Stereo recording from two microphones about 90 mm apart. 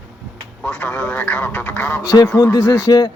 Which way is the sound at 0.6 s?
15° left (ahead or behind).